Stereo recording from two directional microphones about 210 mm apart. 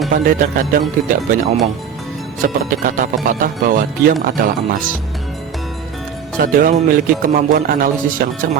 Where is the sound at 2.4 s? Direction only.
40° right (ahead or behind).